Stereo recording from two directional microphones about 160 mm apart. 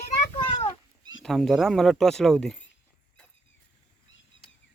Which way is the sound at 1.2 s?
Centre (ahead or behind).